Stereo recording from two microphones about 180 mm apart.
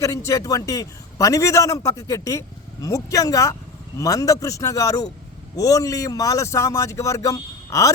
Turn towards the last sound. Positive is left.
turn(degrees=20)  # may be behind; listen again after turning